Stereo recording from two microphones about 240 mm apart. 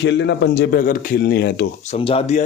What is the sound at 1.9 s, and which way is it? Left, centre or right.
Speech, left.